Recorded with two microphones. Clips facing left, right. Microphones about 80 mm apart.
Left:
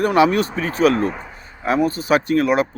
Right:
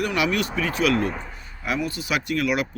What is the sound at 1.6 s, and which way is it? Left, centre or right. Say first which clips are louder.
Speech: left 8 dB; left.